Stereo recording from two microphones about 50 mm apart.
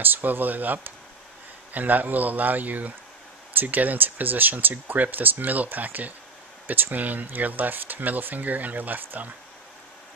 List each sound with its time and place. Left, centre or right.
0.0 s speech: right